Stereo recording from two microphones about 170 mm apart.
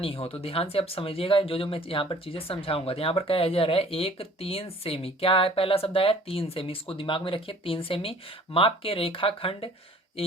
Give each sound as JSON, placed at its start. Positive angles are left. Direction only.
{"t": 0.0, "sound": "speech", "side_deg": 35}